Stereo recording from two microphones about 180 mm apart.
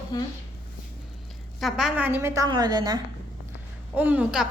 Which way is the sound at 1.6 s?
Centre (ahead or behind).